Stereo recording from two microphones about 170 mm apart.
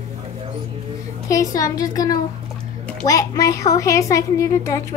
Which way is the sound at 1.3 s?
20° left (ahead or behind).